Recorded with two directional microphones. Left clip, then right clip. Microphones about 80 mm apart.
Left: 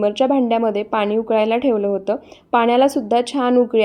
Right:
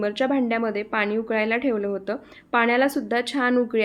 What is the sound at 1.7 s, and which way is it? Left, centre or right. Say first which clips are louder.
Speech: left 7 dB; right.